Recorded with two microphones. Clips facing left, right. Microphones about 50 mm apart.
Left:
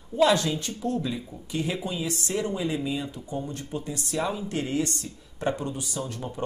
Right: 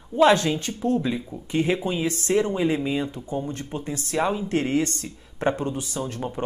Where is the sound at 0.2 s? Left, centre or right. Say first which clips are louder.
Right 4 dB; right.